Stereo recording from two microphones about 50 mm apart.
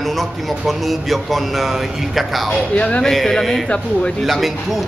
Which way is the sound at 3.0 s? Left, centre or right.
Centre.